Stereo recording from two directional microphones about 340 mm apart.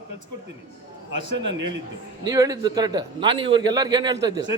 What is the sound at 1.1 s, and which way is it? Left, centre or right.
Speech, centre.